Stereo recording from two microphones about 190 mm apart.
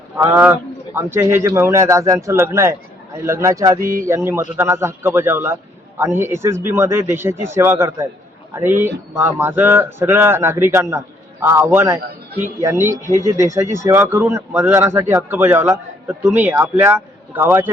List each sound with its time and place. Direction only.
0.2 s speech: 10° right (ahead or behind)
3.8 s speech: 45° right (ahead or behind)
4.0 s speech: 15° right (ahead or behind)